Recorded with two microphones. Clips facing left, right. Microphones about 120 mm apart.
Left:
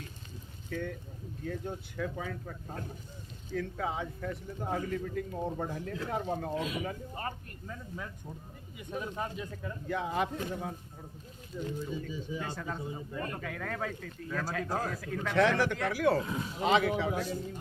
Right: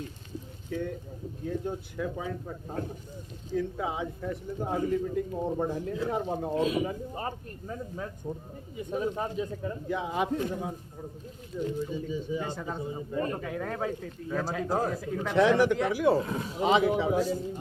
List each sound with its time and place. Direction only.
0.7 s speech: 10° right (ahead or behind)
6.5 s speech: 35° right (ahead or behind)
6.8 s speech: 20° right (ahead or behind); by 12.5 s centre (ahead or behind)
12.5 s speech: 20° right (ahead or behind)